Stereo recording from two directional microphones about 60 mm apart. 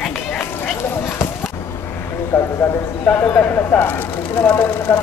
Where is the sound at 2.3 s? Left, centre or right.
Left.